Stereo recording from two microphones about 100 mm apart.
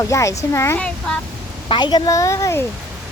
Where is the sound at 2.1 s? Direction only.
30° left (ahead or behind).